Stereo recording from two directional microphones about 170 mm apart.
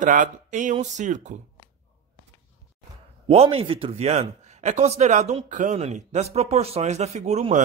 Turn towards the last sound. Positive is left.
turn(degrees=-40)  # may be behind; listen again after turning